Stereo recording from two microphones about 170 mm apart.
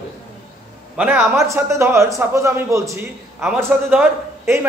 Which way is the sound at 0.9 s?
10° right (ahead or behind).